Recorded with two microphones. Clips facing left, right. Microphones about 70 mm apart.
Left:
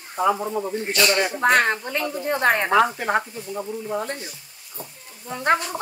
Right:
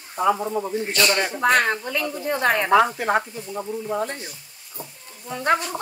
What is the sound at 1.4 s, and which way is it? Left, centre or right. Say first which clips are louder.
A woman's voice: even; left.